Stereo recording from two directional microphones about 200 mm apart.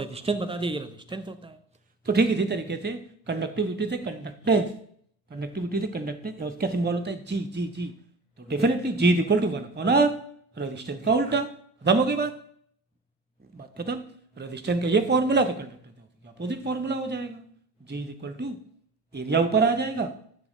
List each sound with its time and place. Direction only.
0.0 s speech: 30° right (ahead or behind)
2.0 s speech: 55° right (ahead or behind)
13.8 s speech: 50° right (ahead or behind)